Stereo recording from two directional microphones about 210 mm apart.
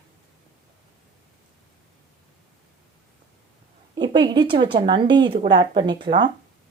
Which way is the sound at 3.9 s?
20° right (ahead or behind).